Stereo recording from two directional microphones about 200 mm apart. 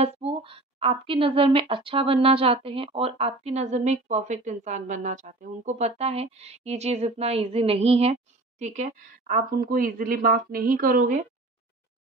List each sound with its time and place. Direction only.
0.0 s a woman's voice: 30° right (ahead or behind)